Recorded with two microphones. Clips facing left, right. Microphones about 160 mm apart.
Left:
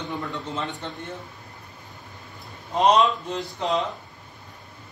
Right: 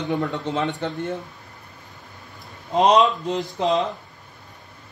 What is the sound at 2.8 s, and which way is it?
Speech, 20° right (ahead or behind).